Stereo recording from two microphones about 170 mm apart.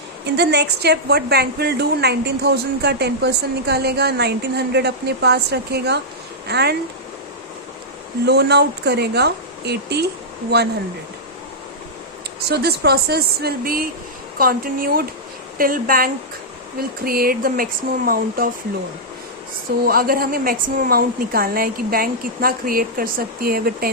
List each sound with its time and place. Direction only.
0.3 s a woman's voice: 80° right
8.3 s a woman's voice: 80° right
12.5 s a woman's voice: 70° right (ahead or behind)
19.8 s a woman's voice: 60° right (ahead or behind)